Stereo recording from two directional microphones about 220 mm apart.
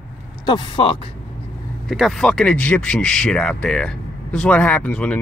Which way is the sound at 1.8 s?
Centre (ahead or behind).